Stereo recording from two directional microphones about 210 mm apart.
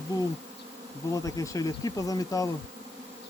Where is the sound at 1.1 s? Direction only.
15° left (ahead or behind).